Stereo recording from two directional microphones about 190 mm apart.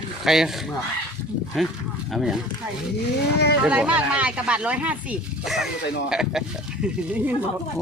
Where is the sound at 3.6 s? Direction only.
5° right (ahead or behind).